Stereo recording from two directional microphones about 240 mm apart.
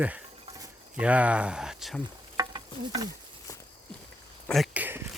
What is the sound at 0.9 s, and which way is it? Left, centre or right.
Speech, centre.